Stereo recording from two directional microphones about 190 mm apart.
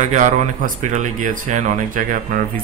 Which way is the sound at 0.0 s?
40° right (ahead or behind).